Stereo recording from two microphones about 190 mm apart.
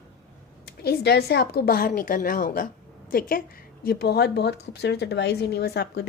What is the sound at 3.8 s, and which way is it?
Speech, 55° left (ahead or behind).